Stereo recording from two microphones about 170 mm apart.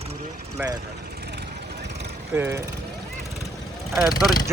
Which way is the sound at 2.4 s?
15° right (ahead or behind).